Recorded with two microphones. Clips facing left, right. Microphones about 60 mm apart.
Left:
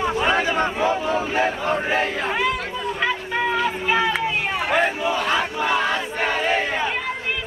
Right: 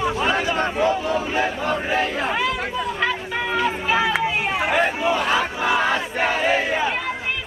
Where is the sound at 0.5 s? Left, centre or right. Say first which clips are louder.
Even; centre; by 2.1 s left.